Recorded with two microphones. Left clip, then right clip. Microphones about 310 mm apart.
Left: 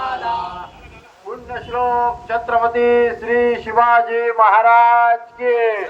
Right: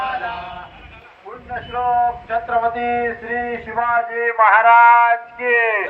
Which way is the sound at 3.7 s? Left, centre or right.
Left.